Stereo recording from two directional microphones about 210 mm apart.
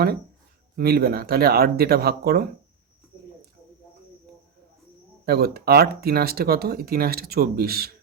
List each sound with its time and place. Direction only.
0.8 s speech: 50° right (ahead or behind)
5.2 s speech: 50° right (ahead or behind)